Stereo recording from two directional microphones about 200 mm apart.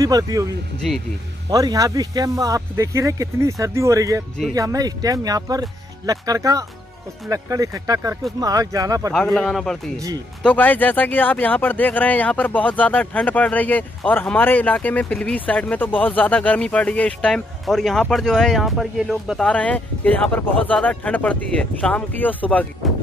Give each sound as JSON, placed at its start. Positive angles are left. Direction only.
{"t": 0.0, "sound": "speech", "side_deg": -15}
{"t": 0.7, "sound": "speech", "side_deg": 0}
{"t": 1.5, "sound": "speech", "side_deg": -20}
{"t": 9.1, "sound": "speech", "side_deg": 0}
{"t": 9.9, "sound": "speech", "side_deg": -15}
{"t": 10.4, "sound": "speech", "side_deg": 10}